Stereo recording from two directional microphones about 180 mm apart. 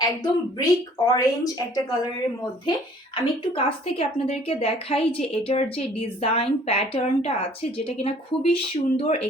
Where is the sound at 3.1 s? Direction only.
30° left (ahead or behind).